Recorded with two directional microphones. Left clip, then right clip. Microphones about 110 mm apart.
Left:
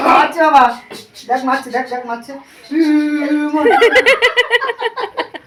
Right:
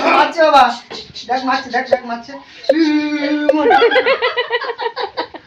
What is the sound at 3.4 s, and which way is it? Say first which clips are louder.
Speech: even; 25° left (ahead or behind).